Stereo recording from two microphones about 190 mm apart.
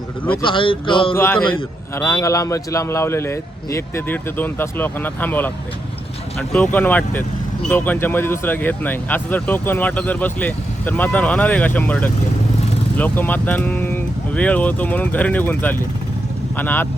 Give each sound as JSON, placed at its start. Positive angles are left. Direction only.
{"t": 0.4, "sound": "speech", "side_deg": 25}
{"t": 1.1, "sound": "speech", "side_deg": 10}
{"t": 6.7, "sound": "speech", "side_deg": 10}